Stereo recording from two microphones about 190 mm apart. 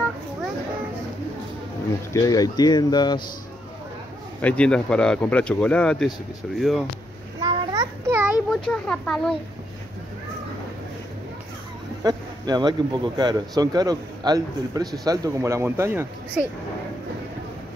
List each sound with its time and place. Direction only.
2.1 s speech: 20° left (ahead or behind)
4.4 s speech: 5° left (ahead or behind)
7.3 s a sound: 25° right (ahead or behind)
8.5 s speech: 5° left (ahead or behind)
12.0 s speech: 20° right (ahead or behind)